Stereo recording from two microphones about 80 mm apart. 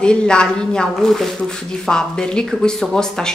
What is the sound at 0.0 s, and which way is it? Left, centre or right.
A woman's voice, centre.